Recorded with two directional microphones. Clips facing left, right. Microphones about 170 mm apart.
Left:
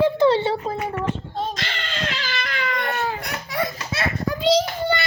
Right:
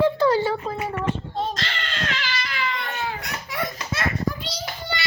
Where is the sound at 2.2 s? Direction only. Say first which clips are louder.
Left 1 dB; 45° left (ahead or behind).